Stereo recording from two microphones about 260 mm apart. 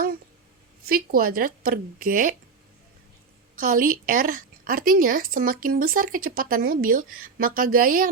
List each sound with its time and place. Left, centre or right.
0.9 s speech: right
3.6 s speech: right